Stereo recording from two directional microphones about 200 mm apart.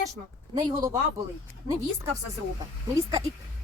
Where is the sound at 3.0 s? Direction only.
15° right (ahead or behind).